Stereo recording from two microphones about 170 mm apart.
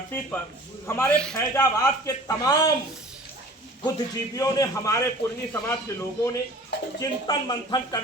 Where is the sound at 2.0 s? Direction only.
20° left (ahead or behind).